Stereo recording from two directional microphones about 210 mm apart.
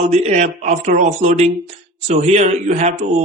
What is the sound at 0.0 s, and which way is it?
Speech, 30° right (ahead or behind).